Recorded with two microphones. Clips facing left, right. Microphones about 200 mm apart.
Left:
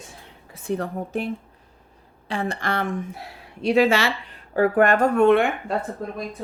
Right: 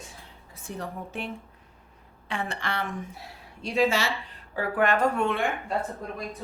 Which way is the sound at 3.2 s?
65° left (ahead or behind).